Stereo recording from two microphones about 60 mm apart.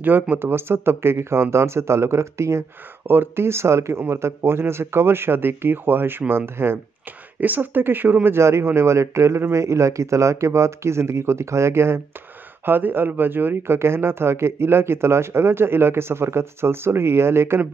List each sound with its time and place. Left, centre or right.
0.0 s speech: right
12.6 s speech: right